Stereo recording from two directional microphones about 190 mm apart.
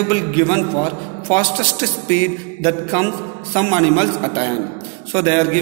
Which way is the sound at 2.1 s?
20° left (ahead or behind).